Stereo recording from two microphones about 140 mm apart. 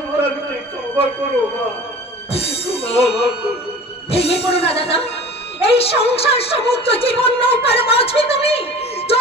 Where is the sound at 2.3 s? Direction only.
45° left (ahead or behind).